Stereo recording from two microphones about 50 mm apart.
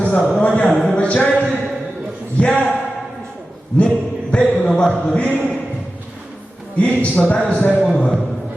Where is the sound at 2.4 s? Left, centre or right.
Left.